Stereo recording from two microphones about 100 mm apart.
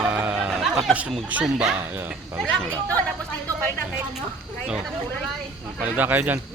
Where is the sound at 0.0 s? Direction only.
20° right (ahead or behind).